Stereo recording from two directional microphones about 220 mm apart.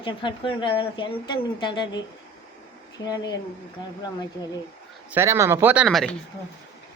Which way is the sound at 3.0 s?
15° left (ahead or behind).